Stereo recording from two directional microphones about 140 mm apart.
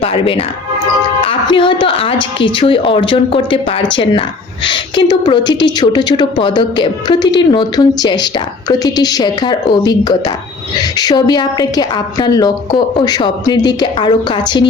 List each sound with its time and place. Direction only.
0.0 s a woman's voice: 40° left (ahead or behind)